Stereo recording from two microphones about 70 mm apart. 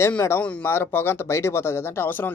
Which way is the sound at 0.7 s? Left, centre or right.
Left.